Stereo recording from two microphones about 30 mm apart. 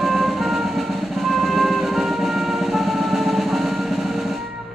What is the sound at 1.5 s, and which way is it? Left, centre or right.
Music, centre.